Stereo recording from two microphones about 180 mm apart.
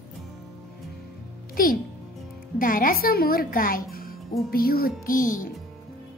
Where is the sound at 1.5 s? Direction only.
50° left (ahead or behind).